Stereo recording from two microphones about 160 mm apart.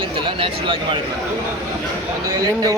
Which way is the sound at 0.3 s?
35° right (ahead or behind).